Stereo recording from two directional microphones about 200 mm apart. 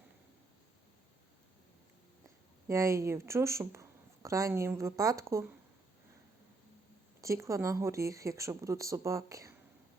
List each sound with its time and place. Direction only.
2.6 s speech: 15° right (ahead or behind)
7.2 s speech: 15° right (ahead or behind)